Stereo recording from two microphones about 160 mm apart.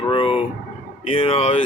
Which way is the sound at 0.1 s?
35° left (ahead or behind).